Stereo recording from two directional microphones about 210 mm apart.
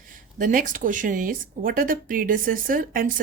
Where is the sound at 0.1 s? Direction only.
40° right (ahead or behind).